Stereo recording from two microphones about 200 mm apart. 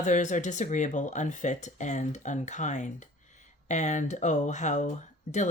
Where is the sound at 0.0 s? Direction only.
35° left (ahead or behind).